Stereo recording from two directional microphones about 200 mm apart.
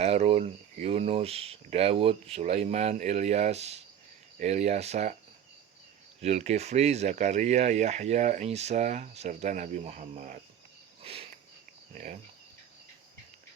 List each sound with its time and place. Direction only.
0.0 s speech: 30° right (ahead or behind)
6.2 s speech: 30° right (ahead or behind)
11.0 s sniff: 30° right (ahead or behind)